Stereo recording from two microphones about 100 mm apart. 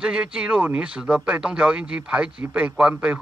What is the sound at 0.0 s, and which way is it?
Speech, 10° right (ahead or behind).